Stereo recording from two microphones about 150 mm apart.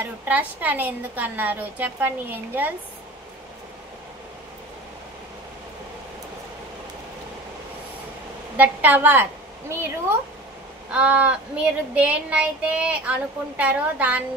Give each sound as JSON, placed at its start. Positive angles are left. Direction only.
{"t": 0.0, "sound": "speech", "side_deg": -10}
{"t": 8.5, "sound": "a woman's voice", "side_deg": -10}